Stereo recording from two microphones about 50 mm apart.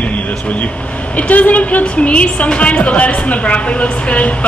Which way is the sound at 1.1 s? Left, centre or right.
Left.